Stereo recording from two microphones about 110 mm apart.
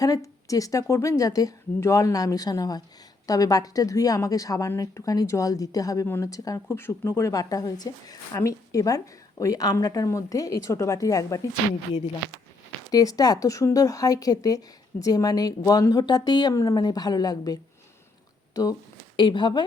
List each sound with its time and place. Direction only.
0.0 s a woman's voice: 30° left (ahead or behind)
12.9 s a woman's voice: 35° left (ahead or behind)
19.1 s speech: 45° left (ahead or behind)